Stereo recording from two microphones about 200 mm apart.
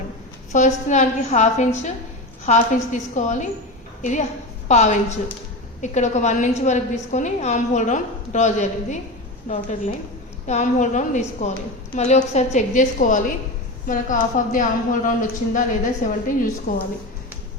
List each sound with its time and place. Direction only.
0.5 s a woman's voice: 35° left (ahead or behind)